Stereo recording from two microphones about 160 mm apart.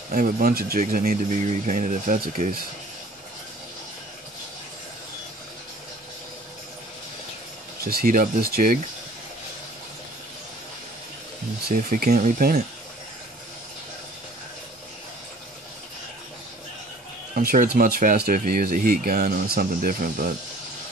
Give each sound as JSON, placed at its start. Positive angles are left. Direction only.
{"t": 0.1, "sound": "speech", "side_deg": -60}
{"t": 7.8, "sound": "speech", "side_deg": -65}
{"t": 11.7, "sound": "speech", "side_deg": -60}
{"t": 17.4, "sound": "speech", "side_deg": -65}